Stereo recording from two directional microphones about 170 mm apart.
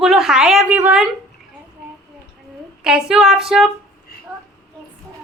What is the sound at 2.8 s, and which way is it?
Speech, 5° right (ahead or behind).